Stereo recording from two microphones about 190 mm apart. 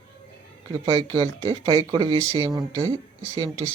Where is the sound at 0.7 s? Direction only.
20° right (ahead or behind).